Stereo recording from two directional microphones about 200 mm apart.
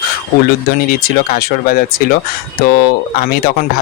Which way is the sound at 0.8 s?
45° left (ahead or behind).